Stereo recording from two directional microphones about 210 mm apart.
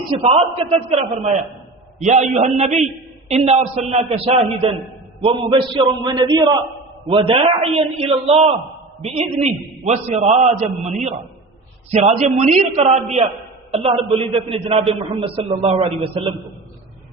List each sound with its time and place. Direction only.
0.2 s a man's voice: 30° right (ahead or behind)